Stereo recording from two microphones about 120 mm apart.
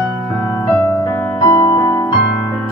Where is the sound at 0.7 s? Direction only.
15° left (ahead or behind).